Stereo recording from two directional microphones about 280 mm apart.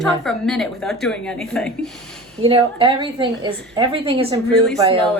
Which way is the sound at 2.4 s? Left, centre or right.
Centre.